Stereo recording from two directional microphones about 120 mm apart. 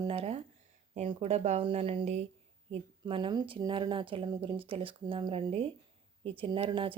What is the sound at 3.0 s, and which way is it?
Speech, 45° right (ahead or behind).